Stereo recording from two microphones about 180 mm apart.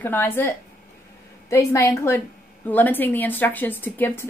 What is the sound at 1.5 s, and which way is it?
A woman's voice, 15° left (ahead or behind).